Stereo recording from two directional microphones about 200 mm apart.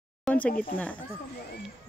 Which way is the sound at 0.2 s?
5° left (ahead or behind).